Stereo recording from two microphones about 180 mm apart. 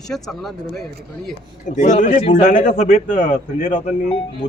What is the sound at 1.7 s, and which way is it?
A man's voice, 45° left (ahead or behind).